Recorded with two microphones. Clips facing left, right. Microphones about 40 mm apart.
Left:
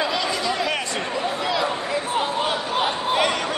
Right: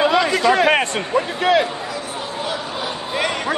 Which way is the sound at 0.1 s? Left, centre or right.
Right.